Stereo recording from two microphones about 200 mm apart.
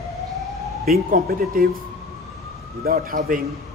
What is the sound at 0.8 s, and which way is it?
Speech, 50° right (ahead or behind).